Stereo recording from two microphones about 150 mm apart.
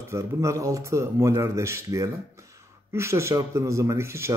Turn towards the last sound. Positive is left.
turn(degrees=-20)  # may be behind; listen again after turning